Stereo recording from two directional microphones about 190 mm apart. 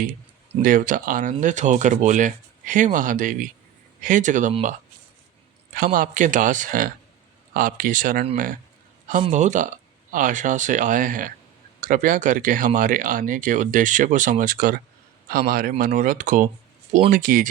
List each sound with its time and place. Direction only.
0.6 s speech: 45° right (ahead or behind)
5.7 s speech: 45° right (ahead or behind)
9.2 s speech: 40° right (ahead or behind)